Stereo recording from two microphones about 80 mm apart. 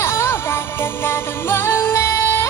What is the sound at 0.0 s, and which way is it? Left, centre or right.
Music, left.